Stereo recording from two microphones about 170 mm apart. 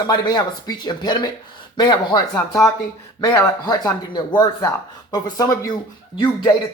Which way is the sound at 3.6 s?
20° left (ahead or behind).